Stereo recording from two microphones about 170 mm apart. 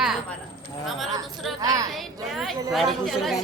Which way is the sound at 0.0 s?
Centre (ahead or behind).